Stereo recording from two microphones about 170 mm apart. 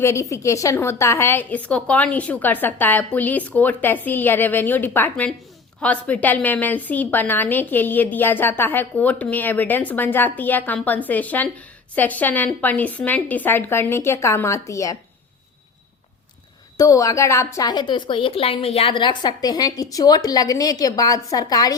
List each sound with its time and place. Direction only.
0.0 s a woman's voice: 15° left (ahead or behind)
16.7 s a woman's voice: 20° left (ahead or behind)